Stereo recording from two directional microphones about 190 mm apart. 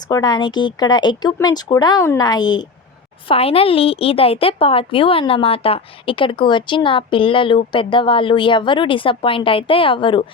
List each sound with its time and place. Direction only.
0.1 s a woman's voice: 20° left (ahead or behind)